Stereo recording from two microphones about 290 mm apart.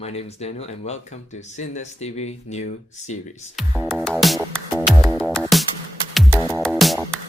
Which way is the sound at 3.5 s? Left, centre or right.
Centre.